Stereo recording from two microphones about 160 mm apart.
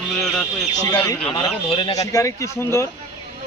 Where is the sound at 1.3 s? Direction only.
35° left (ahead or behind).